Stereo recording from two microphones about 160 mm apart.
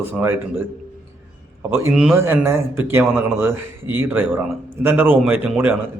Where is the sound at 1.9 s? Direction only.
Centre (ahead or behind).